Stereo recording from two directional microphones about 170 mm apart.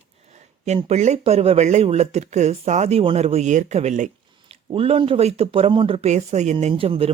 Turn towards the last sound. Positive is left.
turn(degrees=-35)  # may be behind; listen again after turning